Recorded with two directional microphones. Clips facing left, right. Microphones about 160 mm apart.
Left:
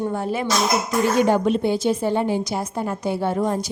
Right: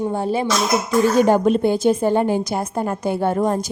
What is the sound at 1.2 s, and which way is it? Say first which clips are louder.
A woman's voice: right 2 dB; 45° right (ahead or behind).